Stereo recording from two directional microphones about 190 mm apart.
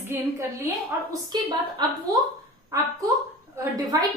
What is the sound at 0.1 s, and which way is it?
Speech, 10° right (ahead or behind).